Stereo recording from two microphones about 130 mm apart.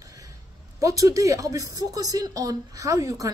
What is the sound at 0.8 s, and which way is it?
Speech, 25° right (ahead or behind).